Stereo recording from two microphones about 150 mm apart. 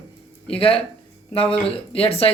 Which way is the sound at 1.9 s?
40° left (ahead or behind).